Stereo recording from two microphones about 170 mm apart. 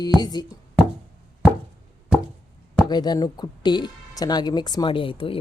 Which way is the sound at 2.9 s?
25° left (ahead or behind).